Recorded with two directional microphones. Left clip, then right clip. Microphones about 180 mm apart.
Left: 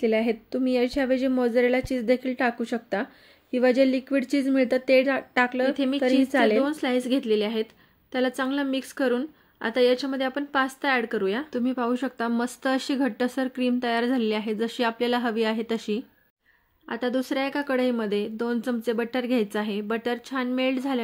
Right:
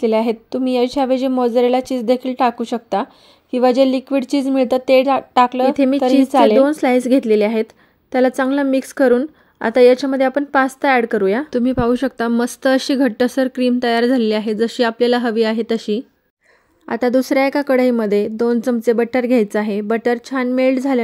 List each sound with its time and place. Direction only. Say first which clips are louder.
0.0 s speech: right 7 dB; 40° right (ahead or behind)
16.8 s speech: right 11 dB; 45° right (ahead or behind)